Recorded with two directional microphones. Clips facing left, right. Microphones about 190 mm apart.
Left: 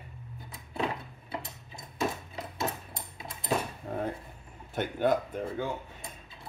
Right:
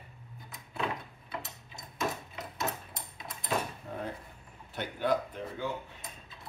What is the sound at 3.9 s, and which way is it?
Dishes, 50° left (ahead or behind).